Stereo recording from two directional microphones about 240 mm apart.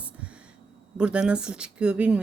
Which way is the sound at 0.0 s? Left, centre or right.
Centre.